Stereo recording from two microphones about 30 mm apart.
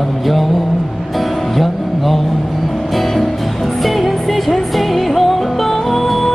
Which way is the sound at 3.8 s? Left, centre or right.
Centre.